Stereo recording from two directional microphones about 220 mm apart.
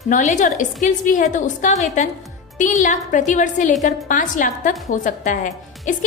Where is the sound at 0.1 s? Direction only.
35° left (ahead or behind).